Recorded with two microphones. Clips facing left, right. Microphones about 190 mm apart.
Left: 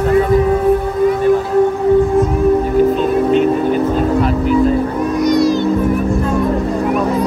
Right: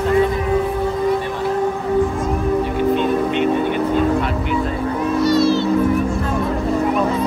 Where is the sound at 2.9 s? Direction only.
35° left (ahead or behind).